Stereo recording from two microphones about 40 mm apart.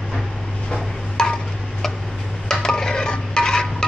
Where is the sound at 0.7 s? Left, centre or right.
Centre.